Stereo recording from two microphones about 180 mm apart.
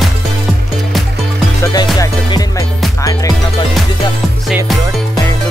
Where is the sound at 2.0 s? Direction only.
20° left (ahead or behind).